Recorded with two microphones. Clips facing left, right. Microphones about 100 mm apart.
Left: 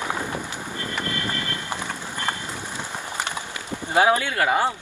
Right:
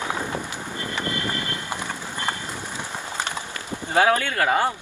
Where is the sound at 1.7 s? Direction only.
15° right (ahead or behind).